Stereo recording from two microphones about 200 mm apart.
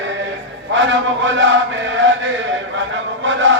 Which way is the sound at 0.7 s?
65° right (ahead or behind).